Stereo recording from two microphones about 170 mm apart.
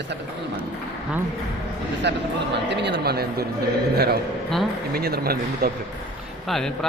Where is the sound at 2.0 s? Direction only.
90° right; by 5.7 s 65° right (ahead or behind).